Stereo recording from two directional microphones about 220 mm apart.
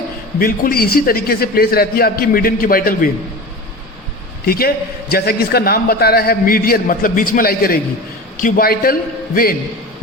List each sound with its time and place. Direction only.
0.3 s a man's voice: 40° left (ahead or behind)
4.4 s a man's voice: 45° left (ahead or behind)